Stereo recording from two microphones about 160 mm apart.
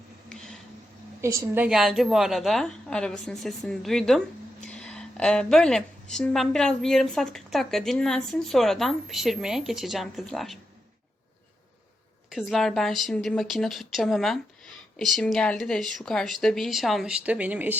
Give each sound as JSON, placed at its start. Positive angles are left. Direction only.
{"t": 1.2, "sound": "a woman's voice", "side_deg": -20}
{"t": 12.3, "sound": "a woman's voice", "side_deg": 0}